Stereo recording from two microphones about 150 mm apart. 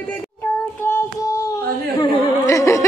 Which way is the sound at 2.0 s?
20° left (ahead or behind).